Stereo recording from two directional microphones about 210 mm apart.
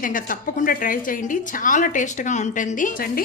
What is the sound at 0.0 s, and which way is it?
A woman's voice, 40° left (ahead or behind).